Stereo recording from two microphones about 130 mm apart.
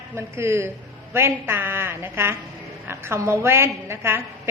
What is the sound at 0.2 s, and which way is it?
A woman's voice, 20° right (ahead or behind).